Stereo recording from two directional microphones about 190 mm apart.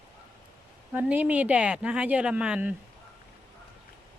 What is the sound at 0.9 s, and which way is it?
Speech, 10° right (ahead or behind).